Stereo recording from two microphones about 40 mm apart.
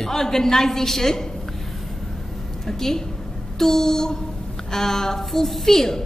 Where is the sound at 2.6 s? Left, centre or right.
Centre.